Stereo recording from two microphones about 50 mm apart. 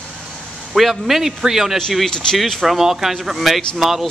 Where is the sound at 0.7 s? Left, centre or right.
Centre.